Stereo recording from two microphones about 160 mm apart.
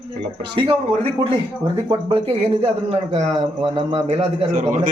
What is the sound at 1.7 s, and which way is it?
Speech, 30° right (ahead or behind).